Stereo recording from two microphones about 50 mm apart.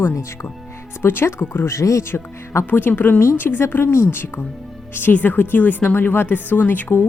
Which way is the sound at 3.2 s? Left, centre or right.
Left.